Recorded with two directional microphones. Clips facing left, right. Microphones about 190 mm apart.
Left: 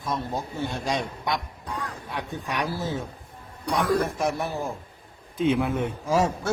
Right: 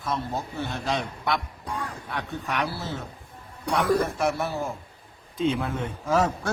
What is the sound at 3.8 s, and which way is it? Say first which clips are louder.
Speech: right 1 dB; 10° right (ahead or behind).